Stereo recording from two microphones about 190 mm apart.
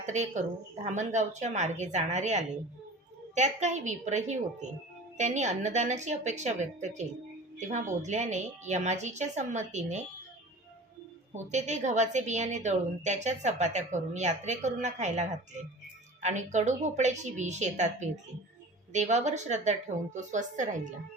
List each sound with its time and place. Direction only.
0.0 s a woman's voice: 40° right (ahead or behind)
11.5 s a woman's voice: 40° right (ahead or behind)